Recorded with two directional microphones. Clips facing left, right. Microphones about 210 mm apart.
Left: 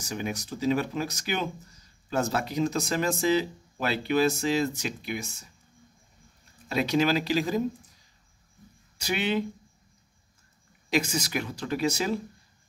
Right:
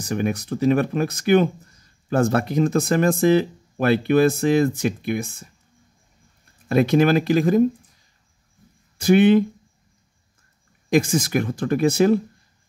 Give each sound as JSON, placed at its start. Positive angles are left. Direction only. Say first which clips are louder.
{"t": 0.0, "sound": "speech", "louder": "right 9 dB", "side_deg": -55}
{"t": 6.7, "sound": "speech", "louder": "right 8 dB", "side_deg": -55}
{"t": 8.9, "sound": "speech", "louder": "right 14 dB", "side_deg": -50}
{"t": 10.9, "sound": "speech", "louder": "right 8 dB", "side_deg": -50}